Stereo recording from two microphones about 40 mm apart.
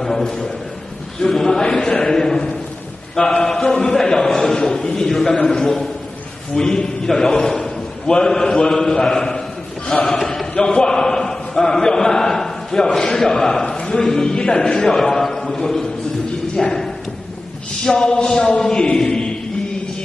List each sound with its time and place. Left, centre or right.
0.0 s a man's voice: centre
17.8 s speech: centre